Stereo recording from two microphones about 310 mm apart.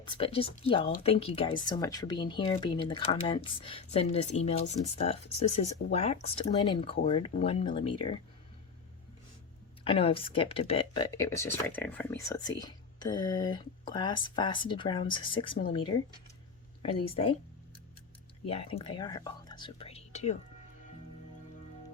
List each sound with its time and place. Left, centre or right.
0.0 s speech: centre
9.8 s speech: centre
16.8 s speech: centre
18.4 s speech: centre